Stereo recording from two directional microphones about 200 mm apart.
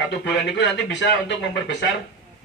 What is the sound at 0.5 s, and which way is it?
Speech, 65° left (ahead or behind).